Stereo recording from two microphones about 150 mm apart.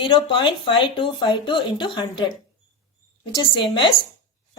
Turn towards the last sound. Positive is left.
turn(degrees=35)  # may be behind; listen again after turning